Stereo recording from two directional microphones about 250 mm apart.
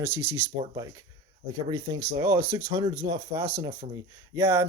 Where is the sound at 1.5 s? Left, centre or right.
Centre.